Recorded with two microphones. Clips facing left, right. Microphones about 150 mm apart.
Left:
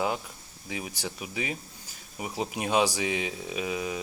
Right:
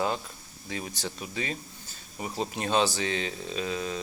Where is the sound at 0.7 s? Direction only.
10° left (ahead or behind).